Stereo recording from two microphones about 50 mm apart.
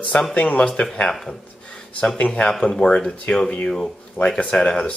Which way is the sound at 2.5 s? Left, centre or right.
Centre.